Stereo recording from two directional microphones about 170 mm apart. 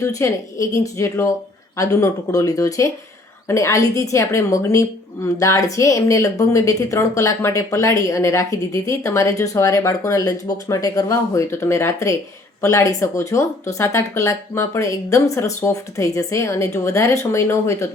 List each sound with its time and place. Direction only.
0.0 s a woman's voice: 20° left (ahead or behind)